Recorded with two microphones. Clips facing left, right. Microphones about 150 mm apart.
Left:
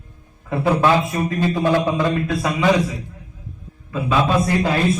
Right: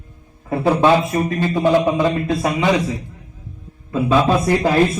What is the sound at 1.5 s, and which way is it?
A man's voice, 20° right (ahead or behind).